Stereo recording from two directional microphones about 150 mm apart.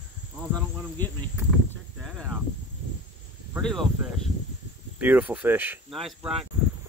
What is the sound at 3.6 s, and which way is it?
Speech, centre (ahead or behind).